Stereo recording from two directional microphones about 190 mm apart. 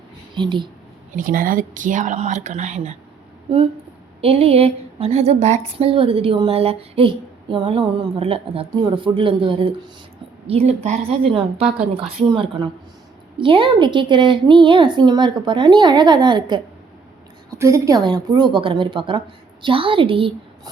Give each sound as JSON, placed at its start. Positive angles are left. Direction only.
{"t": 0.3, "sound": "a woman's voice", "side_deg": -25}
{"t": 1.1, "sound": "a woman's voice", "side_deg": -45}
{"t": 4.2, "sound": "a woman's voice", "side_deg": -30}